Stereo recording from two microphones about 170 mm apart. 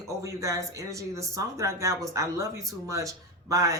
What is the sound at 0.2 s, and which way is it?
Speech, 20° right (ahead or behind).